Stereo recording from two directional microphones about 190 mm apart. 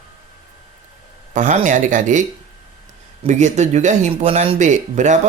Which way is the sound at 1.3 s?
40° right (ahead or behind).